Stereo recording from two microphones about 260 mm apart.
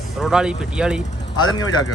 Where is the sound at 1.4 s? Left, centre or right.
Centre.